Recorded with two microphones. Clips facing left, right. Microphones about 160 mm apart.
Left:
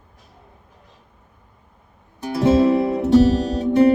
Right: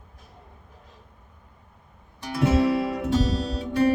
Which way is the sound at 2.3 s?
35° left (ahead or behind).